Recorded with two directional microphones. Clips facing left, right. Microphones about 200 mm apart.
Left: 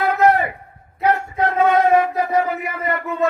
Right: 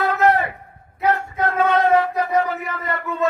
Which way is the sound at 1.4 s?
20° left (ahead or behind).